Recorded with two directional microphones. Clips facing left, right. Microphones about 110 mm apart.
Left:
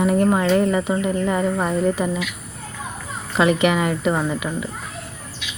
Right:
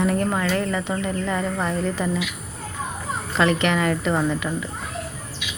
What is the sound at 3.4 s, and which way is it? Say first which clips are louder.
Speech: left 3 dB; 10° left (ahead or behind).